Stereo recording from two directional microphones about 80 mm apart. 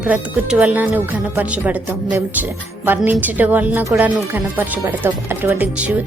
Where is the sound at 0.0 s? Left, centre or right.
Centre.